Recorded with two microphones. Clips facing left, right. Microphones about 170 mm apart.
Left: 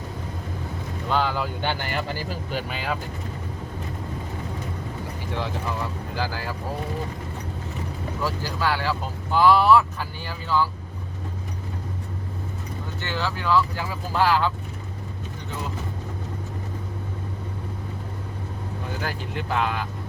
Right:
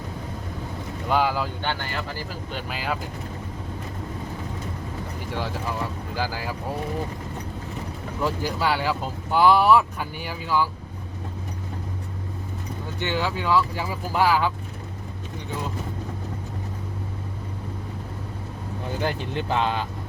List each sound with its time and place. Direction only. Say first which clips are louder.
1.1 s speech: right 2 dB; 10° right (ahead or behind)
2.5 s speech: even; centre (ahead or behind)
6.1 s speech: right 1 dB; 15° right (ahead or behind)
8.2 s speech: right 2 dB; 20° right (ahead or behind)
13.0 s speech: right 3 dB; 15° right (ahead or behind)
19.0 s speech: right 5 dB; 25° right (ahead or behind)